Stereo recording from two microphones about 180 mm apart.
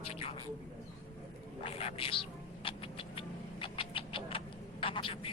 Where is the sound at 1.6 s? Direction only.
35° left (ahead or behind).